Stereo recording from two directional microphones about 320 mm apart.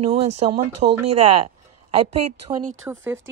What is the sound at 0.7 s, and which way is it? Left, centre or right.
Speech, right.